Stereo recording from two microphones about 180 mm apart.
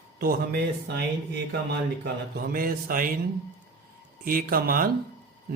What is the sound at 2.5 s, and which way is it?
Mantra, 55° right (ahead or behind).